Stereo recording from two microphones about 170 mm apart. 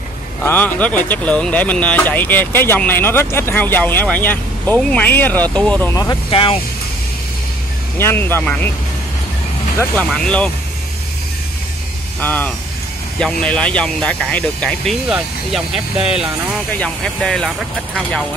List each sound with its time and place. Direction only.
0.4 s speech: 10° left (ahead or behind)
6.3 s speech: 30° left (ahead or behind)
8.0 s speech: 15° left (ahead or behind)
9.9 s speech: 5° left (ahead or behind)
12.2 s speech: 10° left (ahead or behind)
16.7 s speech: 5° left (ahead or behind)